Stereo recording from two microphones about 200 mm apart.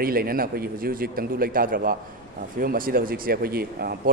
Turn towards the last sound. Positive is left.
turn(degrees=-50)  # may be behind; listen again after turning